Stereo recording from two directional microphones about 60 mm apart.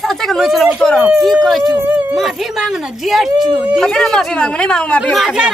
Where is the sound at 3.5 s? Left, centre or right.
Right.